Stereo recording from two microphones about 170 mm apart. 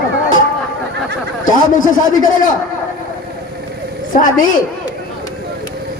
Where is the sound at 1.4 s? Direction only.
50° left (ahead or behind).